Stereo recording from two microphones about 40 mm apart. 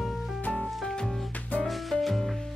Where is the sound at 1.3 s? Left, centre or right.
Left.